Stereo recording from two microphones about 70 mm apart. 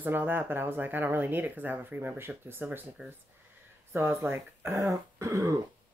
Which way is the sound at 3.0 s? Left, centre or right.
Centre.